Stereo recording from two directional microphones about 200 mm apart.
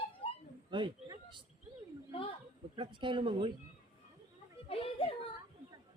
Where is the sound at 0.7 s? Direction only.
25° right (ahead or behind).